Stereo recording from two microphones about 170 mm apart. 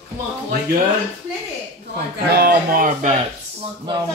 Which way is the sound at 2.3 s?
60° right (ahead or behind).